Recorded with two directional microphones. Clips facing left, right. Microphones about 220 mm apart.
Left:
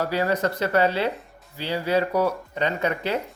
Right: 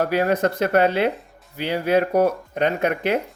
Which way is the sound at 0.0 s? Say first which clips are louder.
Right 4 dB; 50° right (ahead or behind).